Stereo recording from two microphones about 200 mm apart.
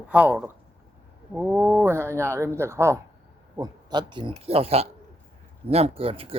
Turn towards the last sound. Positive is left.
turn(degrees=-30)  # may be behind; listen again after turning